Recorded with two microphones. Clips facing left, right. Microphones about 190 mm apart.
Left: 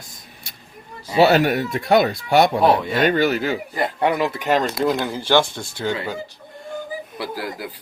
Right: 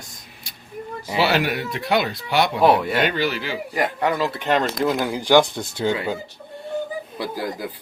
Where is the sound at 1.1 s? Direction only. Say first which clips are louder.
Left 6 dB; 45° left (ahead or behind).